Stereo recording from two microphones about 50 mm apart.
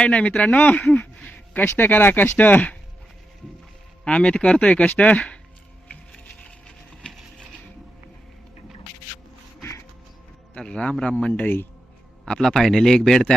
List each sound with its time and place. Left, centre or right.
0.0 s speech: left
1.3 s speech: left
4.0 s speech: left
10.6 s a man's voice: centre
11.1 s speech: left
12.2 s a man's voice: centre